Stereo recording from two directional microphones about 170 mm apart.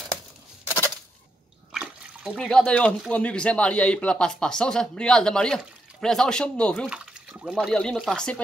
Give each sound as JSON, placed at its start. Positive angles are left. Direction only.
{"t": 0.7, "sound": "a sound", "side_deg": 15}
{"t": 1.7, "sound": "speech", "side_deg": -5}
{"t": 6.9, "sound": "water", "side_deg": -5}
{"t": 7.7, "sound": "speech", "side_deg": 5}